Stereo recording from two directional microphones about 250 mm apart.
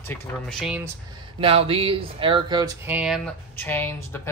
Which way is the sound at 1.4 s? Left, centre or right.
Right.